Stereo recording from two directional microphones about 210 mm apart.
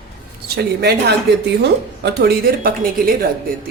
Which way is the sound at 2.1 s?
45° right (ahead or behind).